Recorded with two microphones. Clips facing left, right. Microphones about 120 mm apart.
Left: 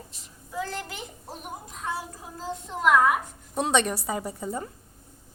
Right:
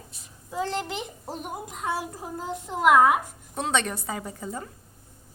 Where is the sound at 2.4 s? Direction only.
10° right (ahead or behind).